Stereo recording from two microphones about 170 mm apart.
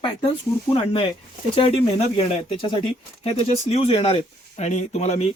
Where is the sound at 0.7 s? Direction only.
30° left (ahead or behind).